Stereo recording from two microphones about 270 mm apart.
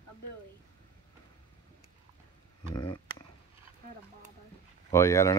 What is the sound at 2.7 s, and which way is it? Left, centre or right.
Speech, centre.